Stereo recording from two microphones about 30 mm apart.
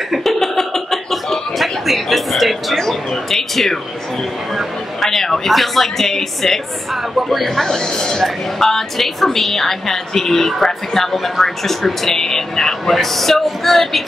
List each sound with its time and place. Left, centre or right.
0.2 s chuckle: centre
3.3 s a woman's voice: centre
5.1 s a man's voice: centre
5.5 s a woman's voice: centre
6.9 s speech: centre
7.8 s a woman's voice: left